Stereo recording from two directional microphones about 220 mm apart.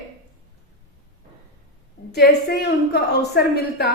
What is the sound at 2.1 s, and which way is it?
A woman's voice, 45° left (ahead or behind).